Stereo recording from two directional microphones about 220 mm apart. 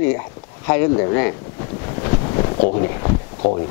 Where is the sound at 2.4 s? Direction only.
30° left (ahead or behind).